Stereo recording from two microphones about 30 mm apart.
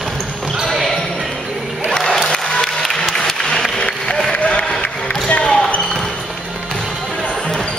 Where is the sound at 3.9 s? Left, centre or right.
Left.